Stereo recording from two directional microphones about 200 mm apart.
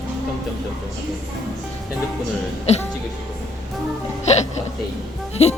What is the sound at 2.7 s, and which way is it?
Music, 30° left (ahead or behind).